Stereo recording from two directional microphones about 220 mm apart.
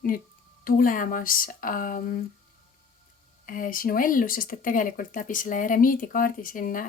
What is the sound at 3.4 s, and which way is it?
Speech, 40° left (ahead or behind).